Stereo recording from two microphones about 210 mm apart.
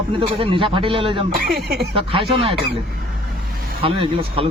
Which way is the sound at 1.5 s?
50° right (ahead or behind).